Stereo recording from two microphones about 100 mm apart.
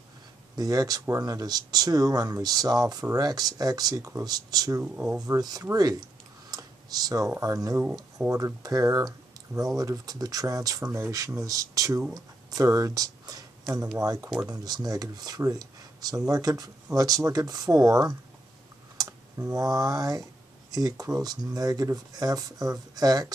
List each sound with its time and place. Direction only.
0.6 s speech: 40° right (ahead or behind)